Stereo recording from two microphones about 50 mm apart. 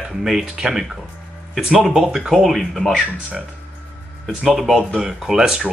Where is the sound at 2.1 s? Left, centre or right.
Centre.